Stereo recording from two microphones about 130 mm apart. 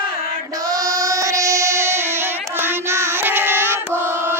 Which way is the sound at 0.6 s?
30° right (ahead or behind).